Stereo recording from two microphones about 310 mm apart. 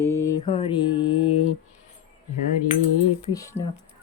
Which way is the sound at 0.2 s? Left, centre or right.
Centre.